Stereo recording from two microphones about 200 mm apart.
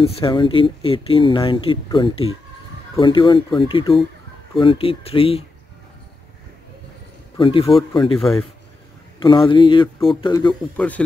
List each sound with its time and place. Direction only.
0.0 s speech: 25° left (ahead or behind)
7.3 s speech: 25° left (ahead or behind)
8.2 s a man's voice: centre (ahead or behind)
9.2 s speech: 25° left (ahead or behind)
10.8 s speech: 5° left (ahead or behind)